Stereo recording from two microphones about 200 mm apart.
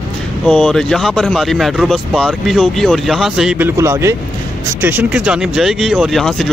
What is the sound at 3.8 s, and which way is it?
Speech, 15° right (ahead or behind).